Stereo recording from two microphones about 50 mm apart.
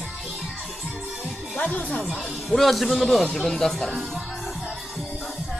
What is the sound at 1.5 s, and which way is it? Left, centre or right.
Speech, left.